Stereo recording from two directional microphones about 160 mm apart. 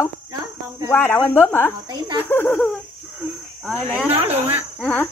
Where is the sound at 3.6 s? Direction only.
5° right (ahead or behind).